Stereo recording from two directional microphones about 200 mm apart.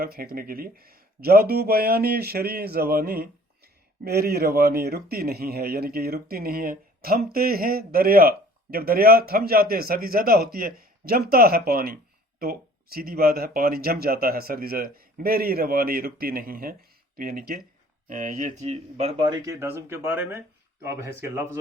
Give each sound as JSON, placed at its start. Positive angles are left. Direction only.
{"t": 0.0, "sound": "speech", "side_deg": -50}